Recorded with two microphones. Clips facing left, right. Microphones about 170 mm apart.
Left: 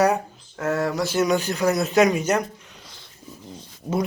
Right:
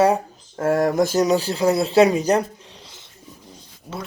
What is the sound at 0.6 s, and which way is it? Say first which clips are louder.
Speech: right 5 dB; 45° right (ahead or behind).